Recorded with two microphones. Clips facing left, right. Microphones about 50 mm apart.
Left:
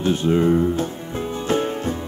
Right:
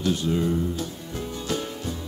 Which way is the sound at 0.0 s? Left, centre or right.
Left.